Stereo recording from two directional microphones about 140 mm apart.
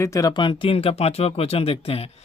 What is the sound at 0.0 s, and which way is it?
Speech, 25° left (ahead or behind).